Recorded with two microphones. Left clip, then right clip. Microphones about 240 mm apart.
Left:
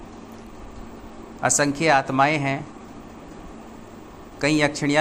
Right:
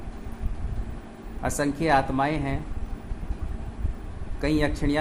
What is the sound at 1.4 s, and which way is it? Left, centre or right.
Speech, centre.